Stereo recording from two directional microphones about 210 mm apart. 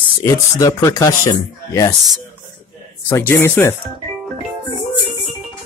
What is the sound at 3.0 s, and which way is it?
Speech, 10° left (ahead or behind).